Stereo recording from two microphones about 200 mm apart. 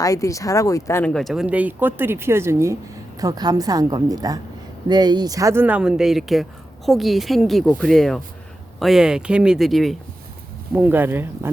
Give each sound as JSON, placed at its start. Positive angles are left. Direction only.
{"t": 0.0, "sound": "a woman's voice", "side_deg": 15}